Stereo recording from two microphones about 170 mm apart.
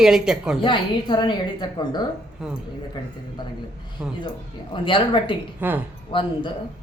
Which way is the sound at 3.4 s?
25° left (ahead or behind).